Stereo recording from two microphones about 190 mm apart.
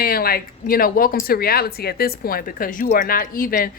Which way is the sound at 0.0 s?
50° left (ahead or behind).